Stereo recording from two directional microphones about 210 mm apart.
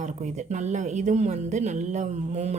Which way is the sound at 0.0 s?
35° right (ahead or behind).